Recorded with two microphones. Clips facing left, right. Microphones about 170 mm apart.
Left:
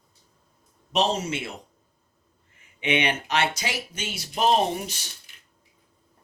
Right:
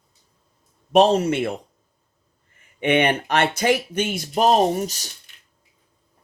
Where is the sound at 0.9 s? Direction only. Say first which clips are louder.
Right 9 dB; 55° right (ahead or behind).